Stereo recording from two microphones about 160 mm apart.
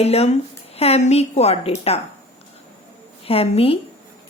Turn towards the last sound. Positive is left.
turn(degrees=35)  # may be behind; listen again after turning